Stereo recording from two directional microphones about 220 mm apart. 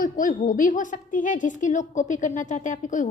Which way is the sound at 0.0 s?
35° left (ahead or behind).